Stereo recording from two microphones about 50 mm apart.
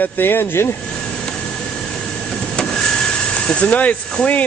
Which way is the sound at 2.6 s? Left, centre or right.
Centre.